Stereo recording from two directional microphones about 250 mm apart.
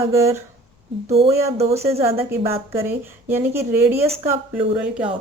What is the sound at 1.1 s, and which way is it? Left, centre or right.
Speech, right.